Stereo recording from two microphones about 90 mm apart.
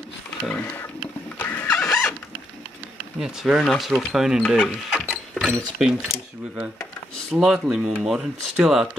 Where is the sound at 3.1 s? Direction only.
5° right (ahead or behind).